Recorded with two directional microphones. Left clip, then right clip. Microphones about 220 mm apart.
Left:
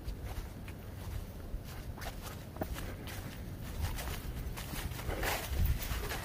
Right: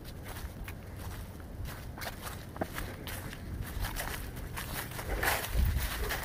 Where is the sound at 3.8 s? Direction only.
50° right (ahead or behind).